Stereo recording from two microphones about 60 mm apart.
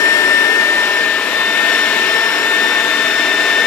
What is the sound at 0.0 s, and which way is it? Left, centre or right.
Vacuum cleaner, left.